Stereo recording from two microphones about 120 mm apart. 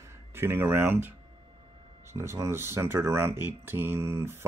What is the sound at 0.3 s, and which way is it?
Speech, 20° right (ahead or behind).